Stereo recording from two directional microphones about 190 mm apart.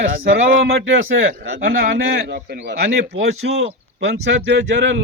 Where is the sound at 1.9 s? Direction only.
60° right (ahead or behind).